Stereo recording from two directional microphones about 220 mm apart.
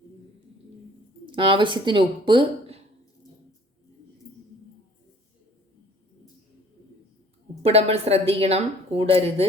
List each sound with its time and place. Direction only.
1.3 s speech: 20° right (ahead or behind)
7.6 s a woman's voice: 25° right (ahead or behind)